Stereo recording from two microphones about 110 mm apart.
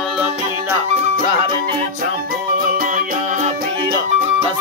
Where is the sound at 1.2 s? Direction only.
50° right (ahead or behind).